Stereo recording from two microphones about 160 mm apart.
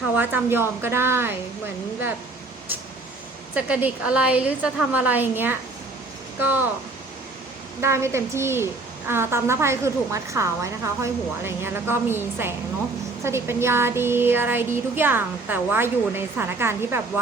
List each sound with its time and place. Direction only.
0.2 s a woman's voice: 15° right (ahead or behind)
3.5 s a woman's voice: 10° right (ahead or behind)
7.8 s a woman's voice: 15° right (ahead or behind)